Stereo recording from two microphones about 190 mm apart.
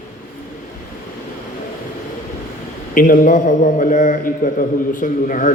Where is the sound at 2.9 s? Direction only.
45° left (ahead or behind).